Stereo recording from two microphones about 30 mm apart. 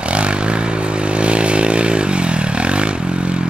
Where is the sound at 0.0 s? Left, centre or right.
Right.